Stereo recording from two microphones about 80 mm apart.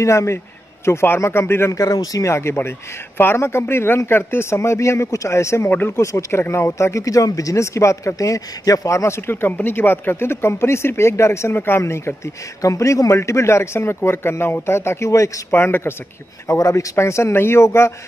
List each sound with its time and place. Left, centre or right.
0.0 s speech: left
1.7 s speech: left
2.2 s speech: left
5.7 s speech: left
5.9 s speech: left
12.6 s speech: left
15.5 s speech: left
16.4 s speech: left